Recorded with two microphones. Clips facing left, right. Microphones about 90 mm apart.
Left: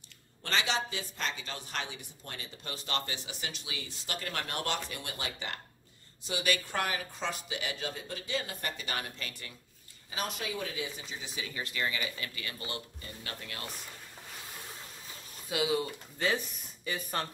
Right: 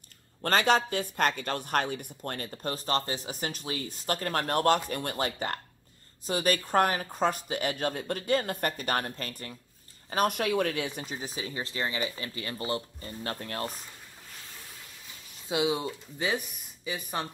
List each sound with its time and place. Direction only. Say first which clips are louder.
0.4 s speech: right 8 dB; 50° right (ahead or behind)
10.0 s speech: right 10 dB; 55° right (ahead or behind)
15.4 s speech: right 3 dB; 20° right (ahead or behind)